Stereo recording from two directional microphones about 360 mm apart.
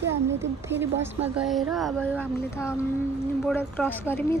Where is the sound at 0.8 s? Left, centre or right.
Centre.